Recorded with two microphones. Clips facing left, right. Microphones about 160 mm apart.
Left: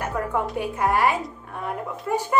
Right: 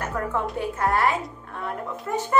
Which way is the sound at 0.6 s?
15° left (ahead or behind).